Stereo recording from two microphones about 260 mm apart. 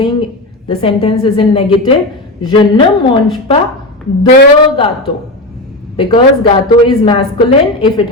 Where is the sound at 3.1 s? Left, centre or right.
Centre.